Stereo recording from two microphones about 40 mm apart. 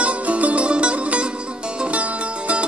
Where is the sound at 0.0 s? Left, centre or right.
Right.